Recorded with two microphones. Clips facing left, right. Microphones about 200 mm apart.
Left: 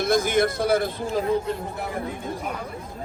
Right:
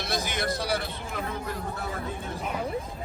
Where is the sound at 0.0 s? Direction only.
50° left (ahead or behind).